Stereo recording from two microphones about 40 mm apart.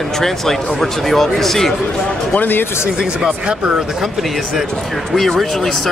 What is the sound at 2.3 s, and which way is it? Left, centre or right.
Speech, left.